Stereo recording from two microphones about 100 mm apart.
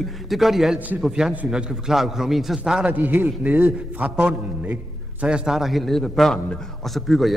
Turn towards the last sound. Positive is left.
turn(degrees=0)  # may be behind; listen again after turning